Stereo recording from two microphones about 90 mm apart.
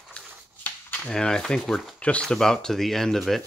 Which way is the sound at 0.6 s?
20° left (ahead or behind).